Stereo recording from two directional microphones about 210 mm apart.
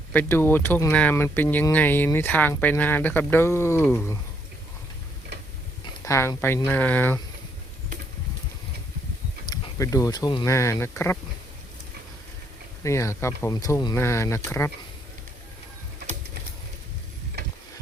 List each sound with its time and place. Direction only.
0.1 s speech: 10° left (ahead or behind)
5.8 s speech: 15° left (ahead or behind)
9.5 s speech: 15° left (ahead or behind)
12.8 s speech: 15° left (ahead or behind)